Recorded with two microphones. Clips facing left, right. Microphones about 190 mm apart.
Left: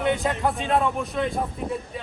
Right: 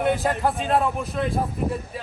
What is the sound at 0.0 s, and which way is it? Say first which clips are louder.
A man's voice: right 1 dB; centre (ahead or behind).